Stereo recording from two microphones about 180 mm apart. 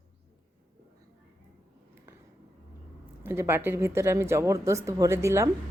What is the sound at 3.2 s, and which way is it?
Speech, 15° right (ahead or behind).